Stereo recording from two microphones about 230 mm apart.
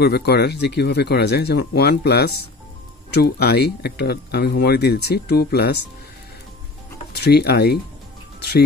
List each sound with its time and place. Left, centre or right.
0.0 s speech: left
7.1 s speech: left